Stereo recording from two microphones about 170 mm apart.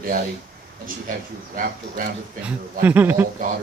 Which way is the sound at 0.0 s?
55° right (ahead or behind).